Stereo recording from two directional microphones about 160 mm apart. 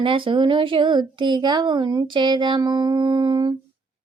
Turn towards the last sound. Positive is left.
turn(degrees=-30)  # may be behind; listen again after turning